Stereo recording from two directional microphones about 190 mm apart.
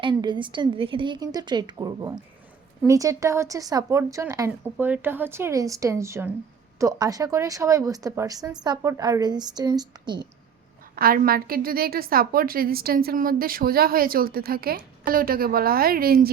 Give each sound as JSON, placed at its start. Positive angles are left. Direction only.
{"t": 0.0, "sound": "a woman's voice", "side_deg": -25}
{"t": 10.9, "sound": "a woman's voice", "side_deg": -50}